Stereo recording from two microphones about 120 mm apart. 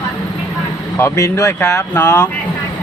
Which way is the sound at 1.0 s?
25° left (ahead or behind).